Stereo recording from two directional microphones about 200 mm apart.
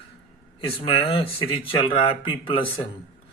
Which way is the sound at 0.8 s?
30° left (ahead or behind).